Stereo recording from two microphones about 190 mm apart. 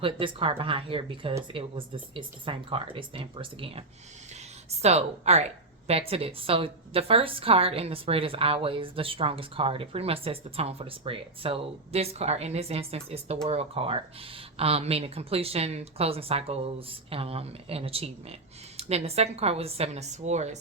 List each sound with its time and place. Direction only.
0.0 s a woman's voice: 30° right (ahead or behind)